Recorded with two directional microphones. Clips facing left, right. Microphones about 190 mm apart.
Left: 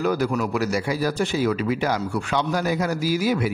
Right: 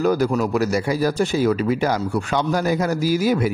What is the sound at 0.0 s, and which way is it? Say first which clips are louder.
A man's voice: right 4 dB; 40° right (ahead or behind).